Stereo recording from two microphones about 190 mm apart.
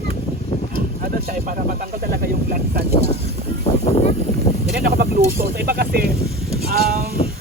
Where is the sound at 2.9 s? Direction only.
35° left (ahead or behind).